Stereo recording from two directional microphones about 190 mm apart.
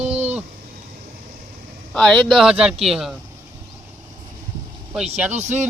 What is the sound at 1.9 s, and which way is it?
Speech, centre (ahead or behind).